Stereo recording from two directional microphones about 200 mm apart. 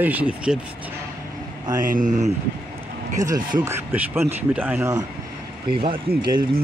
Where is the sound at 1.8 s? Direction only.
40° right (ahead or behind).